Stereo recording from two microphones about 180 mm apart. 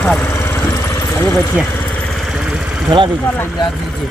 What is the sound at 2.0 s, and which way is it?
Vehicle, centre (ahead or behind).